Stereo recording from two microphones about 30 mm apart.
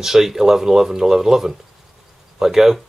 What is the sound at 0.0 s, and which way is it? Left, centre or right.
Speech, centre.